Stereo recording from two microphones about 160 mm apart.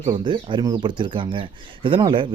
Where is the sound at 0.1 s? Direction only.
30° right (ahead or behind).